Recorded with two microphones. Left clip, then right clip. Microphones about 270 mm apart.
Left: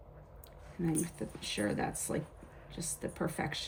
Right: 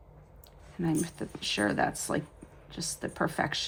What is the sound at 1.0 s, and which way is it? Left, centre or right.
Speech, centre.